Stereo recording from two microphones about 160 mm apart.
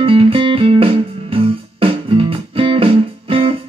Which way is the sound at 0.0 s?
35° right (ahead or behind).